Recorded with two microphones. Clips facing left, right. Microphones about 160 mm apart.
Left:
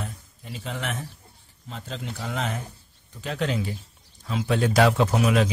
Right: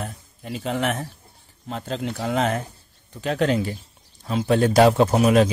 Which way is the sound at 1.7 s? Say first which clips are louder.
Right 7 dB; 60° right (ahead or behind).